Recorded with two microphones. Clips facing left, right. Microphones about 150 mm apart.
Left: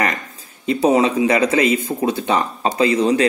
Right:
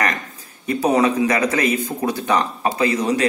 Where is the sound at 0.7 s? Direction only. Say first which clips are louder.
Left 2 dB; 25° left (ahead or behind).